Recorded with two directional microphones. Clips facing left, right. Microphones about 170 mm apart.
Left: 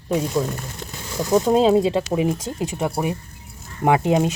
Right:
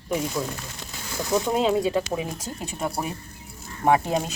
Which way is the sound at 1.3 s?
30° left (ahead or behind).